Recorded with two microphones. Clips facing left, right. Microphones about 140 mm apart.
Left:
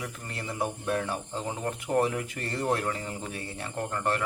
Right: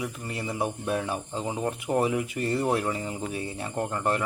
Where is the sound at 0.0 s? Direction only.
10° right (ahead or behind).